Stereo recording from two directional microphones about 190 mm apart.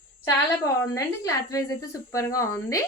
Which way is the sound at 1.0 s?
15° left (ahead or behind).